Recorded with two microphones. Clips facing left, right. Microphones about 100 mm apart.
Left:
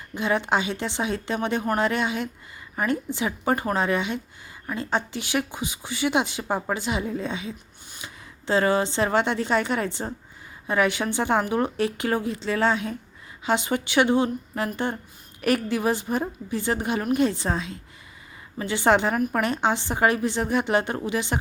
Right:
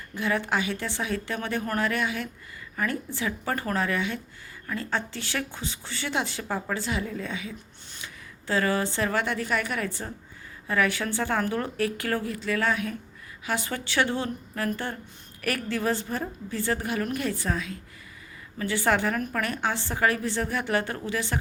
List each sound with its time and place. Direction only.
0.1 s speech: 20° left (ahead or behind)